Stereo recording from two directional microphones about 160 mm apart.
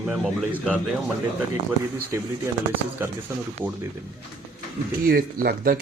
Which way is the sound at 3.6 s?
10° right (ahead or behind).